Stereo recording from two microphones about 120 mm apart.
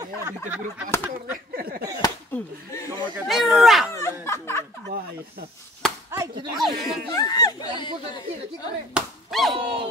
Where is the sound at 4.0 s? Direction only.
20° left (ahead or behind).